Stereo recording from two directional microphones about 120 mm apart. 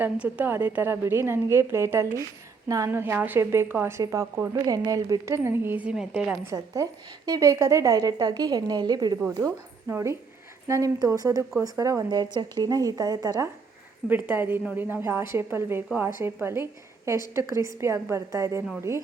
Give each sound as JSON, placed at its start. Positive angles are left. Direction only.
{"t": 0.0, "sound": "a woman's voice", "side_deg": -15}
{"t": 6.4, "sound": "a woman's voice", "side_deg": -25}
{"t": 14.1, "sound": "a woman's voice", "side_deg": -15}